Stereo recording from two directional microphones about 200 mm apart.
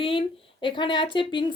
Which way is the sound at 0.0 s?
25° left (ahead or behind).